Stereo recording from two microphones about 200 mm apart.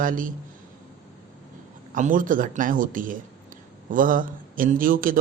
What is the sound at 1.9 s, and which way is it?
Speech, 40° right (ahead or behind).